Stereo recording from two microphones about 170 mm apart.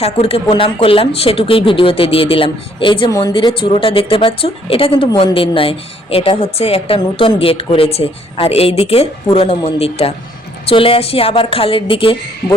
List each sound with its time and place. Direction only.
0.0 s speech: 35° left (ahead or behind)